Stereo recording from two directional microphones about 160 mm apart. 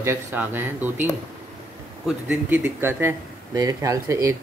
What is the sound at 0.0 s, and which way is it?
Speech, 15° right (ahead or behind).